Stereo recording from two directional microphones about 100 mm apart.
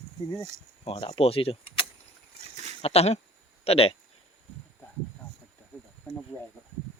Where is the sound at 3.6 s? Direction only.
80° left.